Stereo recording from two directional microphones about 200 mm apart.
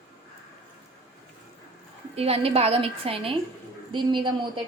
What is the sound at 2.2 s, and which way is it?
A woman's voice, 30° right (ahead or behind).